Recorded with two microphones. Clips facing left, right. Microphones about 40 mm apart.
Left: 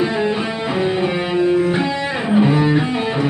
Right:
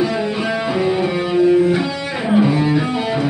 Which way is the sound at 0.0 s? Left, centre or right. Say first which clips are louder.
Left 1 dB; left.